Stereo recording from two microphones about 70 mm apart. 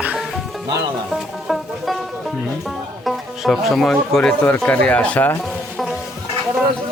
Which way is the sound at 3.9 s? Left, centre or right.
Centre.